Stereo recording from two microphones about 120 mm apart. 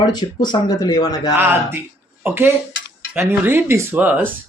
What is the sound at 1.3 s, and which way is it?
Speech, 20° right (ahead or behind).